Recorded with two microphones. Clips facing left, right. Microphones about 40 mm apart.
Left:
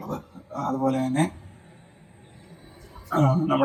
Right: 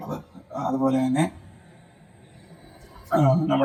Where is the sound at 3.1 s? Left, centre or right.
Centre.